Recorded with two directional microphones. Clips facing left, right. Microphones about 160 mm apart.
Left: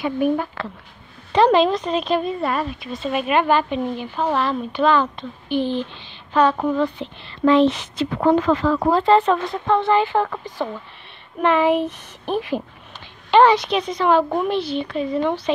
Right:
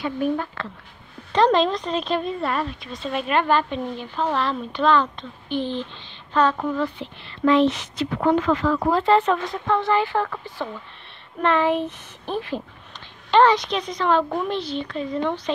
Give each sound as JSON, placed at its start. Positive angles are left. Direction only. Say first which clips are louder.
{"t": 0.0, "sound": "a woman's voice", "louder": "left 4 dB", "side_deg": 10}
{"t": 6.5, "sound": "speech", "louder": "left 4 dB", "side_deg": 25}